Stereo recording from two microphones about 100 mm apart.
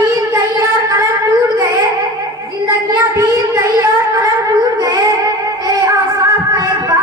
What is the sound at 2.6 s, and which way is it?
Child singing, 35° right (ahead or behind).